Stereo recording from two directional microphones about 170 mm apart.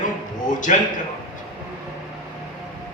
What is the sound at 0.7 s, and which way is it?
Speech, 45° left (ahead or behind).